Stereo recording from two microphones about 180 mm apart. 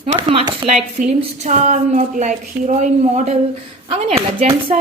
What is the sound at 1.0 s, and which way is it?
A woman's voice, 45° right (ahead or behind).